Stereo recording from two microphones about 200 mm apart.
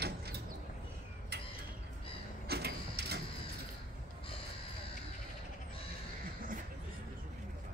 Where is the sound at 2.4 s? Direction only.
55° right (ahead or behind).